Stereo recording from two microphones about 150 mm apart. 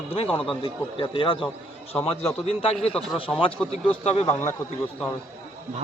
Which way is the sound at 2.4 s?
40° left (ahead or behind).